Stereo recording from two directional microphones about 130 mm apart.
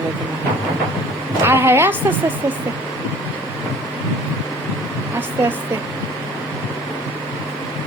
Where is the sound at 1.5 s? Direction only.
20° right (ahead or behind).